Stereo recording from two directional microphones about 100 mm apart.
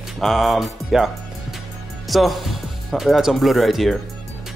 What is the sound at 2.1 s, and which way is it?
Speech, centre (ahead or behind).